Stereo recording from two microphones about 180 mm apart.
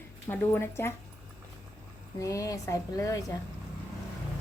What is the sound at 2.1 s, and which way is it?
A woman's voice, 20° left (ahead or behind).